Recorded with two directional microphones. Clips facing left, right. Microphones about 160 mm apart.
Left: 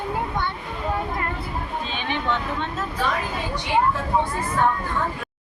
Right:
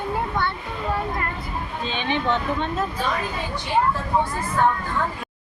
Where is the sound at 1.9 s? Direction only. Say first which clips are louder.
Right 3 dB; 20° right (ahead or behind).